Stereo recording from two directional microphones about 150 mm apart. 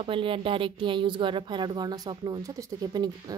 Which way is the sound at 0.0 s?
35° right (ahead or behind).